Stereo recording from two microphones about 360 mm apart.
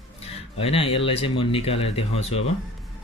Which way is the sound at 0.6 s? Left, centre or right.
Centre.